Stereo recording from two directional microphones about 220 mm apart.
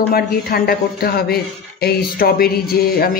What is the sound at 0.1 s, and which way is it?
Speech, 45° left (ahead or behind).